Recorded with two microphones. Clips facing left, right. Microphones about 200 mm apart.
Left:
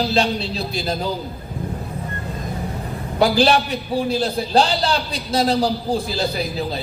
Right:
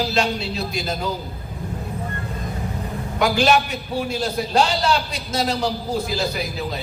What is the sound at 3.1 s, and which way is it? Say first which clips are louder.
A man's voice: left 2 dB; 35° left (ahead or behind).